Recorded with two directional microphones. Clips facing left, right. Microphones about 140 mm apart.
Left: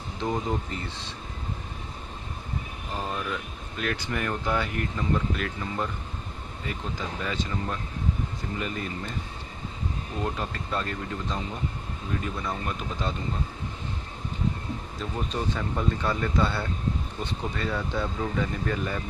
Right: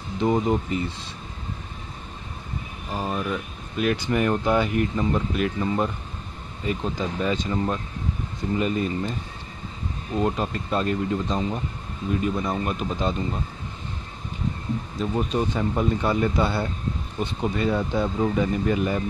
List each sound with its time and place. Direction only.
0.2 s speech: 15° right (ahead or behind)
2.9 s speech: 15° right (ahead or behind)
10.2 s speech: 20° right (ahead or behind)
15.0 s speech: 20° right (ahead or behind)